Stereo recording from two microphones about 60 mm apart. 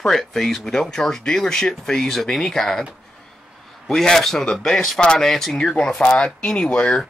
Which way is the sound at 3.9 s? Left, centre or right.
Centre.